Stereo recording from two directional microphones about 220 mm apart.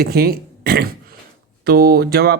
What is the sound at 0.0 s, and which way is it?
Speech, 45° right (ahead or behind).